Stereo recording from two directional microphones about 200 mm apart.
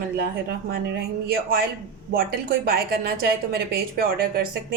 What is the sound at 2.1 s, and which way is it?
A woman's voice, 50° right (ahead or behind).